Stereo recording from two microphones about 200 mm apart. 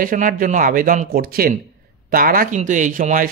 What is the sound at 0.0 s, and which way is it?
Speech, 45° right (ahead or behind).